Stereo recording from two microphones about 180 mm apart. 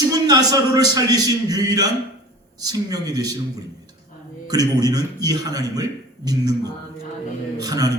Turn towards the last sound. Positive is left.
turn(degrees=-20)  # may be behind; listen again after turning